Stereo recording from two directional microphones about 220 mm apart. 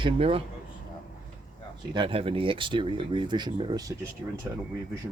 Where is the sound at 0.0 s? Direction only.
25° right (ahead or behind).